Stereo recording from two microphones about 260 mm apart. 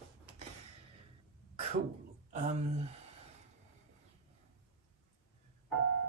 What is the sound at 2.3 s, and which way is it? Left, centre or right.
Speech, right.